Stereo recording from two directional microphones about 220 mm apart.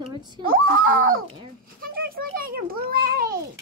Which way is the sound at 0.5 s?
40° right (ahead or behind).